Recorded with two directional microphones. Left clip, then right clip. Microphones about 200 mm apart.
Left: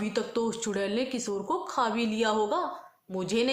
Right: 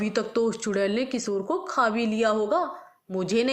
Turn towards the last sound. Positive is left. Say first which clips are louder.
# right 3 dB
turn(degrees=-15)  # may be behind; listen again after turning